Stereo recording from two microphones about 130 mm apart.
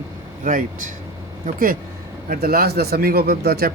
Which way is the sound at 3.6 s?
90° right.